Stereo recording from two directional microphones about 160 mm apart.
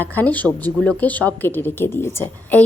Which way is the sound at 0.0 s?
10° left (ahead or behind).